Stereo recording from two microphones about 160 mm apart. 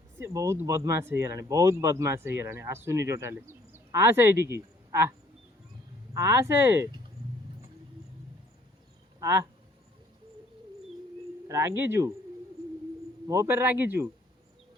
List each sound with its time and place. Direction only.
0.2 s speech: 15° right (ahead or behind)
6.1 s speech: 15° right (ahead or behind)
9.2 s speech: 20° right (ahead or behind)
11.4 s speech: 20° right (ahead or behind)
13.2 s speech: 20° right (ahead or behind)